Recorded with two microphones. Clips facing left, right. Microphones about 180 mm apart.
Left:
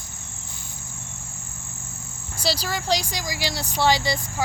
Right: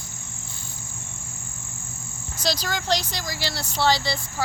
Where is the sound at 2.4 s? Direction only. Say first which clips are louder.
Left 1 dB; 5° left (ahead or behind).